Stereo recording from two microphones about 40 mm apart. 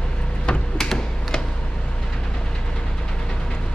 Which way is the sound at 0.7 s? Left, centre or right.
Centre.